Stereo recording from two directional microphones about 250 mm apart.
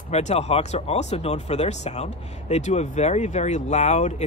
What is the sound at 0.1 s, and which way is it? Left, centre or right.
Speech, left.